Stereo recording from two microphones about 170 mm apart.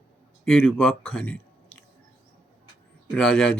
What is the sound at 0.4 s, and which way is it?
Speech, 5° left (ahead or behind).